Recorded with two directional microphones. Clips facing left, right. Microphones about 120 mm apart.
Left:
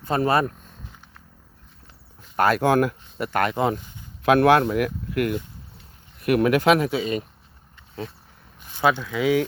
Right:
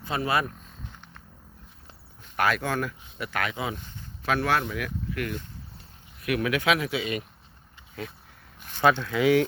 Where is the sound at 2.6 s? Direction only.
55° left (ahead or behind).